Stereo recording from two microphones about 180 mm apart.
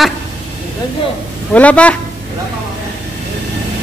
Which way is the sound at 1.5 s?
10° left (ahead or behind).